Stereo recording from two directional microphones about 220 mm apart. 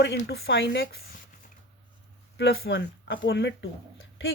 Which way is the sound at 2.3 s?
45° left (ahead or behind).